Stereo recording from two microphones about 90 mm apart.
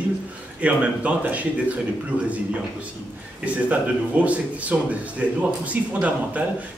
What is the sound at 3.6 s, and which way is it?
Speech, 15° right (ahead or behind).